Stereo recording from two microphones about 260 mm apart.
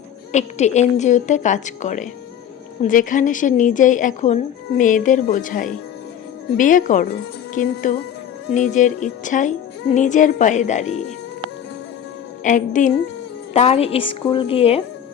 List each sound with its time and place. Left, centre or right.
0.3 s a woman's voice: left
12.4 s speech: left